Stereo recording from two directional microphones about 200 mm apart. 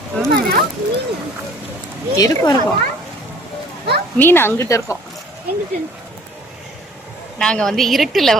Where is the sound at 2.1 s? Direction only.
15° left (ahead or behind).